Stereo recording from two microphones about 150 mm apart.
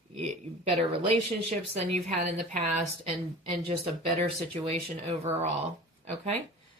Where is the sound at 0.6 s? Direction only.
40° right (ahead or behind).